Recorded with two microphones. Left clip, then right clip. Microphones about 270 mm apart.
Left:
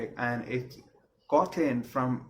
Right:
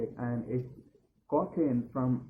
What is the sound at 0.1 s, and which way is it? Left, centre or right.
Speech, centre.